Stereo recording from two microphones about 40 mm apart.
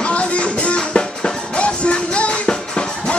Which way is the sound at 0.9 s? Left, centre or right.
Centre.